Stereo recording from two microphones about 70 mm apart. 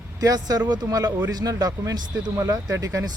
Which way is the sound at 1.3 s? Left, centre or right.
Right.